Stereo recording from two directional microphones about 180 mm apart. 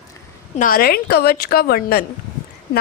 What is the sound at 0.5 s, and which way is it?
A woman's voice, 50° left (ahead or behind).